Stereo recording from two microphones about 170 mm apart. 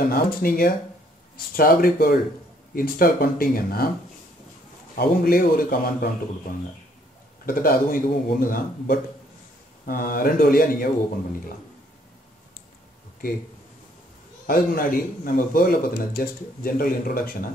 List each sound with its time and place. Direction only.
0.1 s speech: 60° left (ahead or behind)
4.9 s speech: 60° left (ahead or behind)
7.4 s speech: 55° left (ahead or behind)
14.4 s speech: 55° left (ahead or behind)